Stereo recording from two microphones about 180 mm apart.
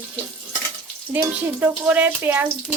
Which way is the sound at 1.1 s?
10° right (ahead or behind).